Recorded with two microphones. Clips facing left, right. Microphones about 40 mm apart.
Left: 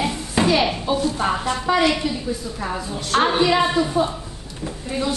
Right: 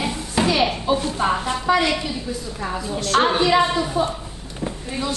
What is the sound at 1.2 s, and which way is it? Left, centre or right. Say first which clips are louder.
A woman's voice: right 1 dB; centre.